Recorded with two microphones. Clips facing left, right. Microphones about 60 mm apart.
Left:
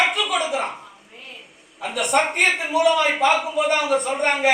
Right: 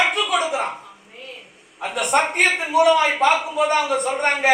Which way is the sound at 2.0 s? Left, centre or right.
Right.